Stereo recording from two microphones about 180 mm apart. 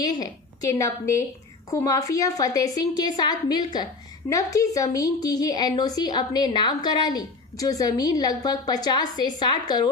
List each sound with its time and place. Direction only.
0.0 s a woman's voice: 20° left (ahead or behind)